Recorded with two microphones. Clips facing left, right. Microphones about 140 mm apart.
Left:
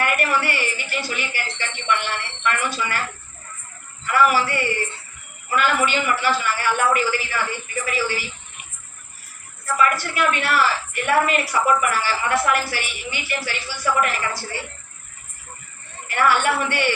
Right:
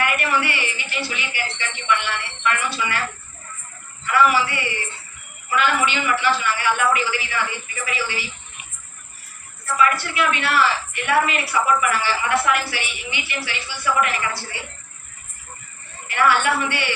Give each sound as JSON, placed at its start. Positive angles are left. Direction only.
{"t": 0.0, "sound": "speech", "side_deg": 45}
{"t": 4.0, "sound": "speech", "side_deg": 45}
{"t": 9.7, "sound": "speech", "side_deg": 45}
{"t": 16.0, "sound": "speech", "side_deg": 45}